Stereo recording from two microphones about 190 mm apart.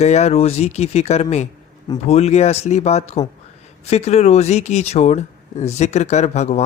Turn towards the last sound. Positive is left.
turn(degrees=35)  # may be behind; listen again after turning